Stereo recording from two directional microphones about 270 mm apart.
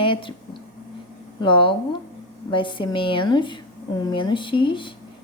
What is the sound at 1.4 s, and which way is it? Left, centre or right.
A woman's voice, centre.